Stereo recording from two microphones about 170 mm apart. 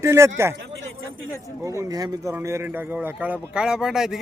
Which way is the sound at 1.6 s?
20° right (ahead or behind).